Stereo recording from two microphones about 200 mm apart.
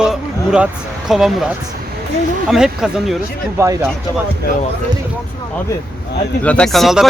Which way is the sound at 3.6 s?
15° right (ahead or behind).